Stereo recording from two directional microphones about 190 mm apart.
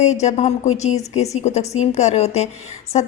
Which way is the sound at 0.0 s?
35° left (ahead or behind).